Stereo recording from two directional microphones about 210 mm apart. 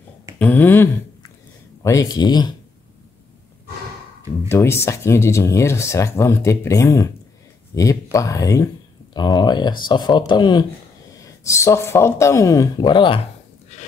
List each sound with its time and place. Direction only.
0.4 s speech: 10° left (ahead or behind)
4.5 s speech: 10° left (ahead or behind)